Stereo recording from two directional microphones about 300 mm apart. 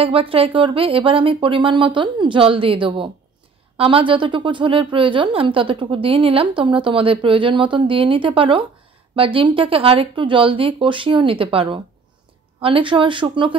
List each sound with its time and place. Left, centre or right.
0.0 s a woman's voice: centre